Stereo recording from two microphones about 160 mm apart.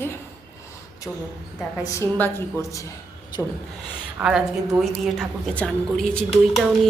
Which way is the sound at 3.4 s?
10° left (ahead or behind).